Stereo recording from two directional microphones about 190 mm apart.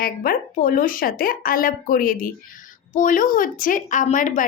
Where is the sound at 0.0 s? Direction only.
50° left (ahead or behind).